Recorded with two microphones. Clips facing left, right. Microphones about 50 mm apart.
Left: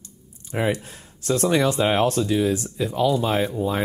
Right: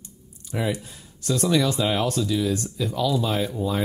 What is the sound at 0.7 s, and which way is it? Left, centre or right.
Speech, left.